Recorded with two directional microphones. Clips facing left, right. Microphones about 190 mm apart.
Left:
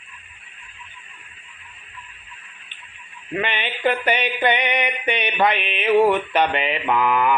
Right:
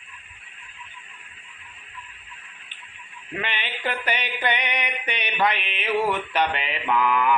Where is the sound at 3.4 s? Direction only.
55° left (ahead or behind).